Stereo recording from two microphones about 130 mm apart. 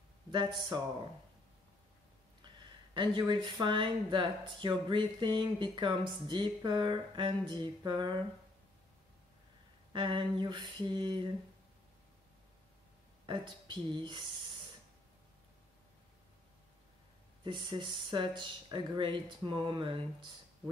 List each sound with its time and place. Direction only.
0.3 s speech: 35° right (ahead or behind)
2.4 s speech: 35° right (ahead or behind)
9.9 s speech: 40° right (ahead or behind)
13.3 s speech: 35° right (ahead or behind)
17.4 s speech: 40° right (ahead or behind)